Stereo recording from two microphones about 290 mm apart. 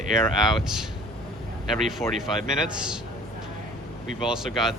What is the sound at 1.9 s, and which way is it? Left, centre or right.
Speech, centre.